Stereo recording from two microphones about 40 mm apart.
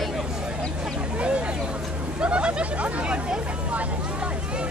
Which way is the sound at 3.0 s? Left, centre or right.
Right.